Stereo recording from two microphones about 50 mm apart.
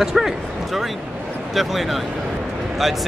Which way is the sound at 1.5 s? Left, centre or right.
Centre.